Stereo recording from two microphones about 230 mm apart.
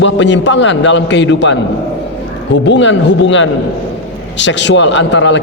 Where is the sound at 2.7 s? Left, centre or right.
Left.